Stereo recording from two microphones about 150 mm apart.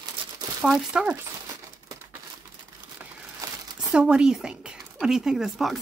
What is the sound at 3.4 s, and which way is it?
Crumpling, 20° right (ahead or behind).